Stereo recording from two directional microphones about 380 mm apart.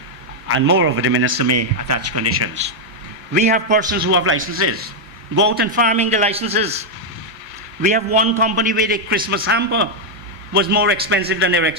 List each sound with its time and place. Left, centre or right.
0.4 s speech: right
1.5 s speech: right
3.3 s a man's voice: centre
7.8 s a man's voice: centre